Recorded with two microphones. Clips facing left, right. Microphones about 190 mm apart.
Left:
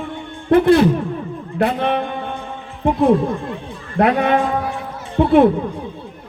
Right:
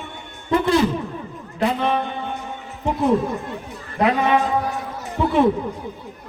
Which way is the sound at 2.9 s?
30° left (ahead or behind).